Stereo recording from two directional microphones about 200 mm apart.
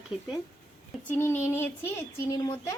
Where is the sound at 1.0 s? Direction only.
10° left (ahead or behind).